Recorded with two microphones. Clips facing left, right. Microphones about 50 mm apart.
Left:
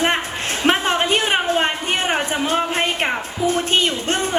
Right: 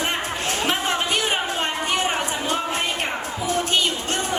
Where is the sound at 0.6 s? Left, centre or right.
Left.